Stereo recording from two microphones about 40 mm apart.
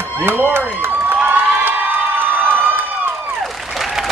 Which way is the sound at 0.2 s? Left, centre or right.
Right.